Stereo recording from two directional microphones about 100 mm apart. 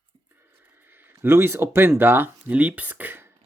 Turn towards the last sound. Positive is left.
turn(degrees=-20)  # may be behind; listen again after turning